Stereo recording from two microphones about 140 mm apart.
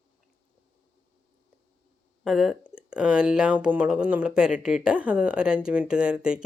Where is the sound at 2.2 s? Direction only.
5° right (ahead or behind).